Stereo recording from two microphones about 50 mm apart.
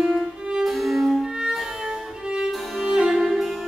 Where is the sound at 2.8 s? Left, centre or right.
Centre.